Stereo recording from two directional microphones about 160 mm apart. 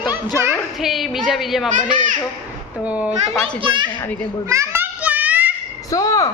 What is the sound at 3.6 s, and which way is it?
Speech, 30° right (ahead or behind).